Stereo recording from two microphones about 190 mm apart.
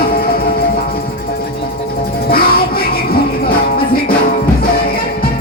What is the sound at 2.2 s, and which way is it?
Music, 50° left (ahead or behind).